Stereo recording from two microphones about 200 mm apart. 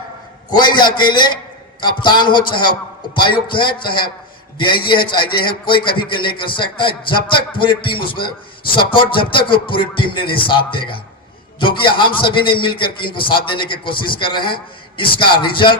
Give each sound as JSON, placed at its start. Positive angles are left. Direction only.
{"t": 0.5, "sound": "a man's voice", "side_deg": 20}